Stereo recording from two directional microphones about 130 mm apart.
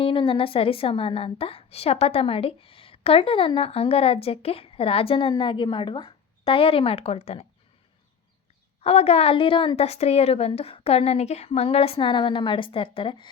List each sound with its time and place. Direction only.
0.0 s a woman's voice: 40° left (ahead or behind)
8.8 s a woman's voice: 55° left (ahead or behind)